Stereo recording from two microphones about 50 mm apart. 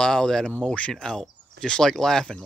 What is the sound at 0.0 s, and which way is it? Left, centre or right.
Speech, centre.